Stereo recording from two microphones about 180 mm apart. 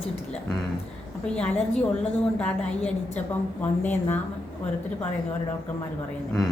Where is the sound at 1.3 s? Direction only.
5° left (ahead or behind).